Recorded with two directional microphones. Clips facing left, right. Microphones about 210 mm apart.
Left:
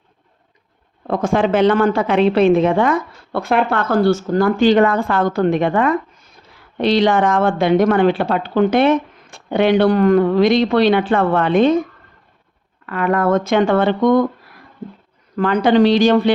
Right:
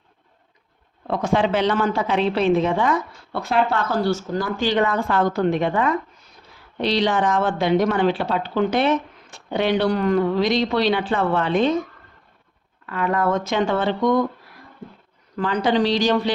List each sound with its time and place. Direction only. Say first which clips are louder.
1.0 s speech: left 4 dB; 50° left (ahead or behind)
12.8 s speech: left 4 dB; 60° left (ahead or behind)
15.4 s speech: left 7 dB; 55° left (ahead or behind)